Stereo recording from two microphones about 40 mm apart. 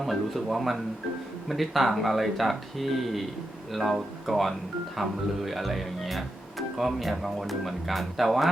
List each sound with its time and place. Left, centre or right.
0.0 s speech: centre